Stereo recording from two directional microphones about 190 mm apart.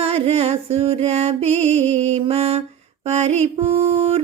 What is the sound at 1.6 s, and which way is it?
Mantra, 35° right (ahead or behind).